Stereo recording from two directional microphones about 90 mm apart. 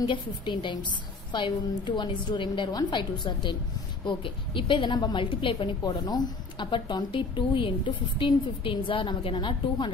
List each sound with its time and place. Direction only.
0.0 s a woman's voice: 60° left (ahead or behind)
4.0 s a woman's voice: 70° left (ahead or behind)
5.2 s a woman's voice: 70° left (ahead or behind)
5.9 s a woman's voice: 50° left (ahead or behind)